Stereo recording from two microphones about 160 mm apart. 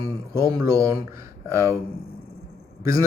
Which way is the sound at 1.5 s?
20° right (ahead or behind).